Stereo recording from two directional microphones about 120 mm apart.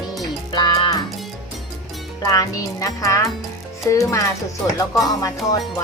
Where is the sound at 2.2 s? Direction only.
30° left (ahead or behind).